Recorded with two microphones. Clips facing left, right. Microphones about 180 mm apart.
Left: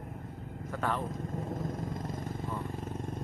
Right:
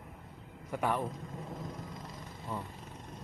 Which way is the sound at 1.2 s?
50° left (ahead or behind).